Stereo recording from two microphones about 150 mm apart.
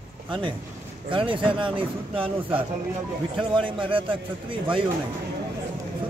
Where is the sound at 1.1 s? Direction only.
35° right (ahead or behind).